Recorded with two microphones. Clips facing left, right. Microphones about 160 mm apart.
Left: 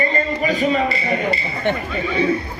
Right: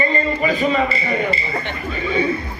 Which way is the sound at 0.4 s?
40° left (ahead or behind).